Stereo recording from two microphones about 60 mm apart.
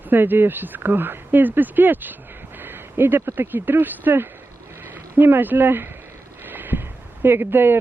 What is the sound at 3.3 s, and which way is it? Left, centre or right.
Speech, right.